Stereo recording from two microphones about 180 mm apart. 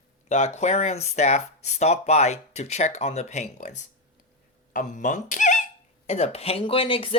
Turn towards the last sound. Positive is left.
turn(degrees=30)  # may be behind; listen again after turning